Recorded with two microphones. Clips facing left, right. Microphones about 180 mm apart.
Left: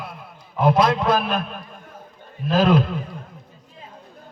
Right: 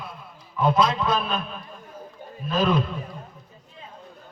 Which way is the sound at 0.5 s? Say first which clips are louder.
Left 3 dB; 85° left.